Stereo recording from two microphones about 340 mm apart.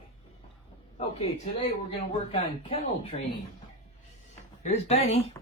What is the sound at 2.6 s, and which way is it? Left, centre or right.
Speech, centre.